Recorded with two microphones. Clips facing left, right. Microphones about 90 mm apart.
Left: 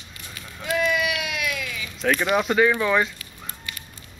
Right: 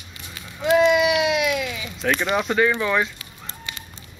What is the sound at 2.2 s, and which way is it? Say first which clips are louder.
Speech: left 1 dB; 5° left (ahead or behind).